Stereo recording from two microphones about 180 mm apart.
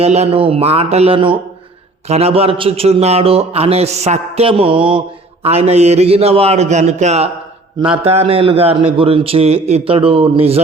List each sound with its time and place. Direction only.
0.0 s a man's voice: 35° right (ahead or behind)